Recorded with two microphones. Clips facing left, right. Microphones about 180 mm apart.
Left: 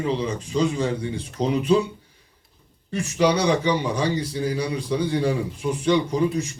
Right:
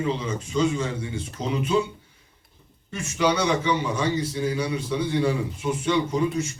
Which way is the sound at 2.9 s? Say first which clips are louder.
Left 3 dB; 35° left (ahead or behind).